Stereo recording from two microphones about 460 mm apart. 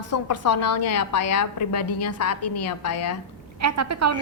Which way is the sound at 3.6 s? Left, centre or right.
Right.